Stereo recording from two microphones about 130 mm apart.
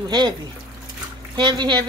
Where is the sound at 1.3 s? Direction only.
35° right (ahead or behind).